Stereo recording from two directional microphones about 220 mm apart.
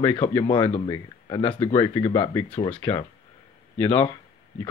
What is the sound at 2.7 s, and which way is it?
Speech, 10° left (ahead or behind).